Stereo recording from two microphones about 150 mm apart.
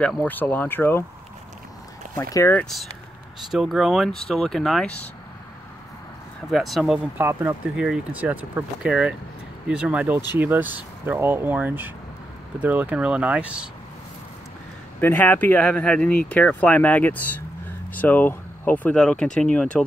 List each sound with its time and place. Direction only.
0.0 s speech: 10° left (ahead or behind)
2.1 s speech: 20° left (ahead or behind)
2.6 s speech: centre (ahead or behind)
6.5 s speech: centre (ahead or behind)
7.2 s speech: 15° right (ahead or behind)
15.0 s speech: 10° left (ahead or behind)